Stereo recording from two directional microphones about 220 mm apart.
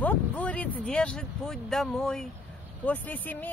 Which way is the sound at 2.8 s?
5° left (ahead or behind).